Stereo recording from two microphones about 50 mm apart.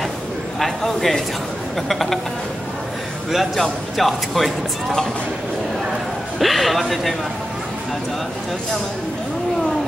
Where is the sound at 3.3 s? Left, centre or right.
Centre.